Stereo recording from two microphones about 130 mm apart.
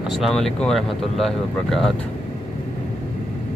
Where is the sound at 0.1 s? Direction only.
Centre (ahead or behind).